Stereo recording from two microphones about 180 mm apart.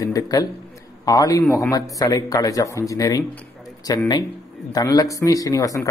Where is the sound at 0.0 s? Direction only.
20° left (ahead or behind).